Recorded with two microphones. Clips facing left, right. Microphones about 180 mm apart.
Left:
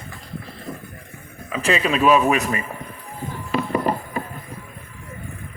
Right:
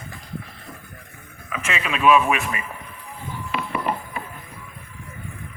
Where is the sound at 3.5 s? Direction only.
40° left (ahead or behind).